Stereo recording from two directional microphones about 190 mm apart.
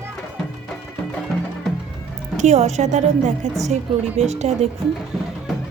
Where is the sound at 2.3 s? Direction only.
35° right (ahead or behind).